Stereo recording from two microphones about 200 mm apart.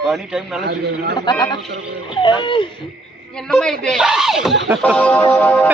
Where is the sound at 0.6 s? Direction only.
55° right (ahead or behind).